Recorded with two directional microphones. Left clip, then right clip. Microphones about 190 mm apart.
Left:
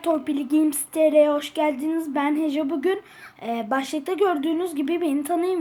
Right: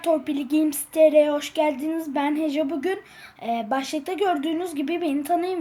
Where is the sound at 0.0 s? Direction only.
15° right (ahead or behind).